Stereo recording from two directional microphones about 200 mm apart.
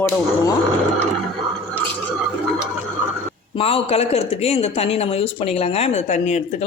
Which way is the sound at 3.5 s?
30° left (ahead or behind).